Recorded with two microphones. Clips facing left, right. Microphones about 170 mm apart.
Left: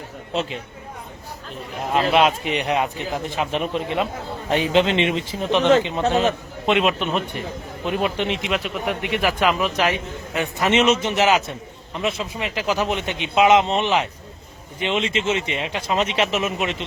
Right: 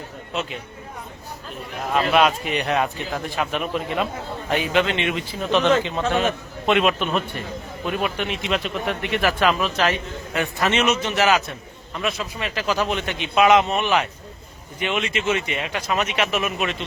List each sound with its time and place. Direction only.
1.9 s speech: 25° left (ahead or behind)
8.4 s a man's voice: 10° left (ahead or behind)